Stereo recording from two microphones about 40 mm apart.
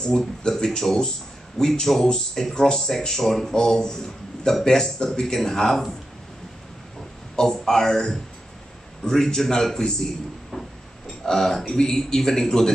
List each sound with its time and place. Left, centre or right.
0.0 s speech: centre
7.3 s speech: centre
10.5 s a sound: centre
11.2 s speech: centre